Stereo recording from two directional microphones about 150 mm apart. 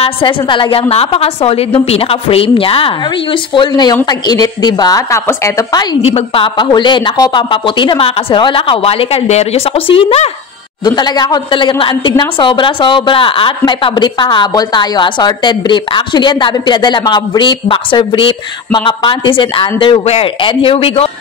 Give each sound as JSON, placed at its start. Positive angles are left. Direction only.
{"t": 0.0, "sound": "a woman's voice", "side_deg": 35}
{"t": 6.1, "sound": "a woman's voice", "side_deg": 35}
{"t": 11.0, "sound": "a woman's voice", "side_deg": 30}